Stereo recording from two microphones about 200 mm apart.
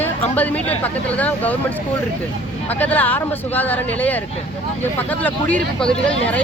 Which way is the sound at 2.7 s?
10° left (ahead or behind).